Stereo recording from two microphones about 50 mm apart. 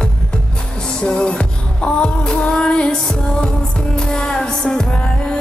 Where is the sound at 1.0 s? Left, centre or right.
Left.